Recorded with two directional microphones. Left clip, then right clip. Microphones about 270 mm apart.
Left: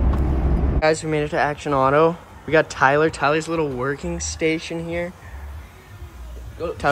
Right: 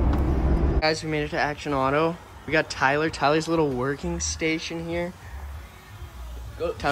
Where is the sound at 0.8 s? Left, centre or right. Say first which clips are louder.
Left 7 dB; centre.